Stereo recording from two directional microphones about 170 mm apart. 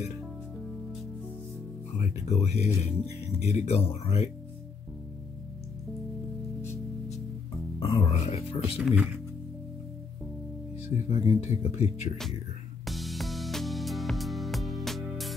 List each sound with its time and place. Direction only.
2.0 s speech: 40° left (ahead or behind)
7.8 s speech: 35° left (ahead or behind)
8.7 s speech: 5° right (ahead or behind)
11.1 s speech: 35° left (ahead or behind)
12.8 s music: centre (ahead or behind)